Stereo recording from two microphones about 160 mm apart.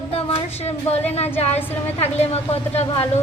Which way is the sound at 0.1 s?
40° left (ahead or behind).